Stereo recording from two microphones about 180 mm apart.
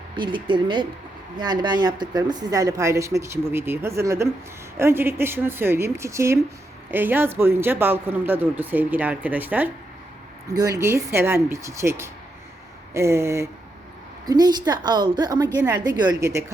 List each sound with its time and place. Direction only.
0.2 s a woman's voice: 25° right (ahead or behind); by 9.7 s 10° right (ahead or behind)
10.5 s a woman's voice: 20° right (ahead or behind)